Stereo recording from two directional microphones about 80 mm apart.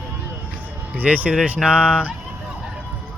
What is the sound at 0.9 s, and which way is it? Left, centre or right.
Speech, centre.